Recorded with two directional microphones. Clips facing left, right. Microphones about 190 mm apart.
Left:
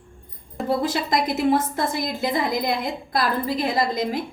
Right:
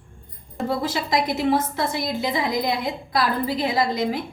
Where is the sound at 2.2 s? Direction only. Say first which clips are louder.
Left 2 dB; 50° left (ahead or behind).